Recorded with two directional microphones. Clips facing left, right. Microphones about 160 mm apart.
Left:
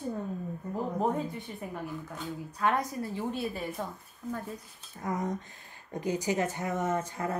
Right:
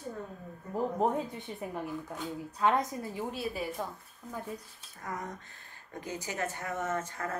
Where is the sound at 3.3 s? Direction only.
5° right (ahead or behind).